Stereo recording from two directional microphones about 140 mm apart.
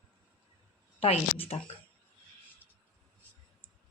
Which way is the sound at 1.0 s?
45° left (ahead or behind).